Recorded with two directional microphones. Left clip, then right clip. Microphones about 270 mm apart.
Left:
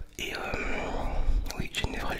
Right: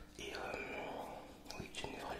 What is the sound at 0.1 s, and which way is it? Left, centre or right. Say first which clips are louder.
Whispering: left 11 dB; left.